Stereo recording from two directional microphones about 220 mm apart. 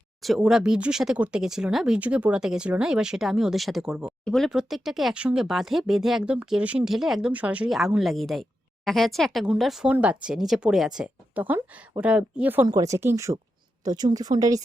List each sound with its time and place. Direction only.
0.2 s a woman's voice: centre (ahead or behind)